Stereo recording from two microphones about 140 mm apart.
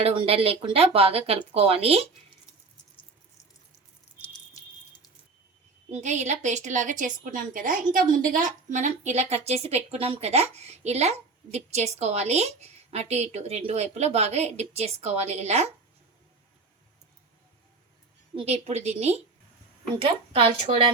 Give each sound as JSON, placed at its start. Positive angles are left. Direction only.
{"t": 0.0, "sound": "a woman's voice", "side_deg": -40}
{"t": 5.9, "sound": "a woman's voice", "side_deg": -55}
{"t": 18.3, "sound": "a woman's voice", "side_deg": -50}